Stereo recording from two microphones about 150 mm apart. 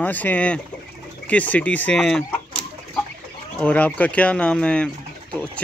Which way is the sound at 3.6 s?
10° left (ahead or behind).